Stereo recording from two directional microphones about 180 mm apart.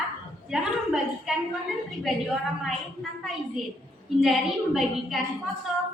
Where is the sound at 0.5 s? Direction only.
Centre (ahead or behind).